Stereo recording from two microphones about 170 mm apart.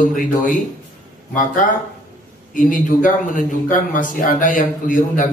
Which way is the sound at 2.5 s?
50° left (ahead or behind).